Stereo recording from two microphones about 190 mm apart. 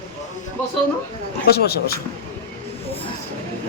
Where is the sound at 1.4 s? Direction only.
55° left (ahead or behind).